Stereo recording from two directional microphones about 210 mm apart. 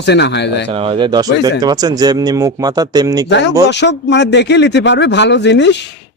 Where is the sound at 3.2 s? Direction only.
55° left (ahead or behind).